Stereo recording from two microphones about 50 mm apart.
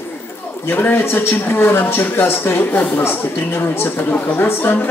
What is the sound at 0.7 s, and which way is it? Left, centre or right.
A woman's voice, left.